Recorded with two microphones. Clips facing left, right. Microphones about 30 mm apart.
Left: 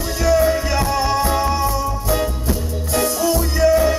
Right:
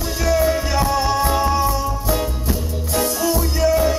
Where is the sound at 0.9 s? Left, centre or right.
Centre.